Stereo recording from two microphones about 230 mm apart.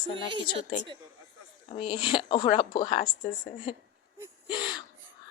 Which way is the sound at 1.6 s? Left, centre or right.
Left.